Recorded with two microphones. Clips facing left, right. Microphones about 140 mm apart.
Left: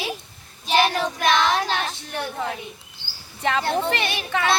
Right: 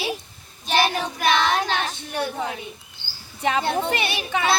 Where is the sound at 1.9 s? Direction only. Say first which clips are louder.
Right 3 dB; 15° right (ahead or behind).